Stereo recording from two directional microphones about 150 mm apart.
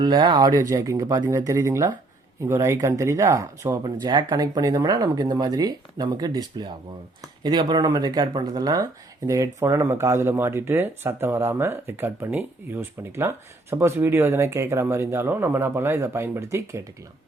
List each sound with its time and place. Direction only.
0.0 s speech: 25° right (ahead or behind)